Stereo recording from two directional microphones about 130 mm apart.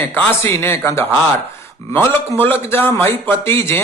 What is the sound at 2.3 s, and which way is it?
A man's voice, 15° left (ahead or behind).